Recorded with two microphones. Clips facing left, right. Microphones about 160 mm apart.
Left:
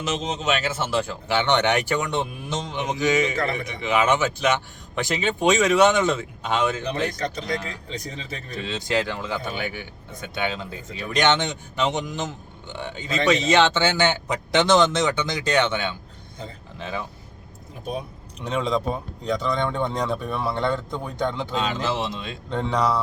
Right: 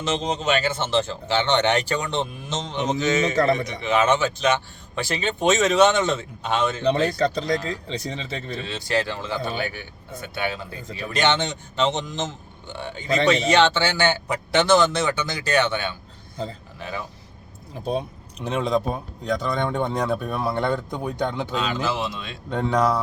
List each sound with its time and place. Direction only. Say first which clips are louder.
0.4 s speech: even; 35° right (ahead or behind)
1.3 s speech: even; 15° left (ahead or behind)
7.2 s speech: right 5 dB; 35° right (ahead or behind)
8.6 s a man's voice: left 1 dB; 15° left (ahead or behind)
17.8 s speech: right 5 dB; 30° right (ahead or behind)
18.4 s speech: right 1 dB; 5° right (ahead or behind)
19.5 s speech: right 1 dB; 15° right (ahead or behind)
21.5 s a man's voice: even; 25° left (ahead or behind)
22.4 s speech: right 2 dB; 10° right (ahead or behind)